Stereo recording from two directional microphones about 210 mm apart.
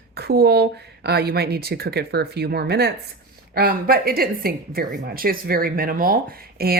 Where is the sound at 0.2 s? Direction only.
50° right (ahead or behind).